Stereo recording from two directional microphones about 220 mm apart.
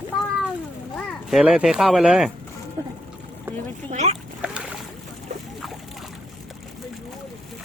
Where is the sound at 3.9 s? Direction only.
30° right (ahead or behind).